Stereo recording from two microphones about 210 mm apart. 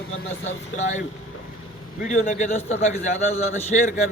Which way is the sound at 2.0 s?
35° left (ahead or behind).